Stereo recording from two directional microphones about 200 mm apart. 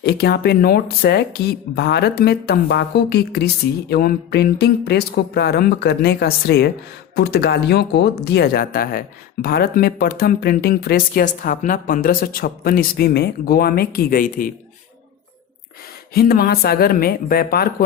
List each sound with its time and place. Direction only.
0.0 s speech: 50° left (ahead or behind)
16.1 s speech: 50° left (ahead or behind)